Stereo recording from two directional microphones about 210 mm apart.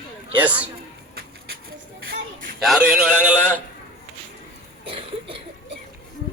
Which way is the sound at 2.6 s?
Centre (ahead or behind).